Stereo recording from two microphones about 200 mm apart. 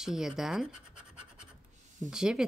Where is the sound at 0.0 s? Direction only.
Centre (ahead or behind).